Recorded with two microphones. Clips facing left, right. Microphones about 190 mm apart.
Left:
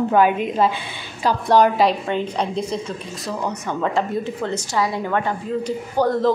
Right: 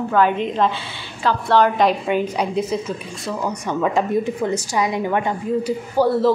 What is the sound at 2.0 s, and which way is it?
Speech, 10° right (ahead or behind).